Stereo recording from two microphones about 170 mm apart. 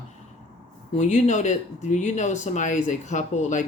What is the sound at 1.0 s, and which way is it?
Speech, 45° left (ahead or behind).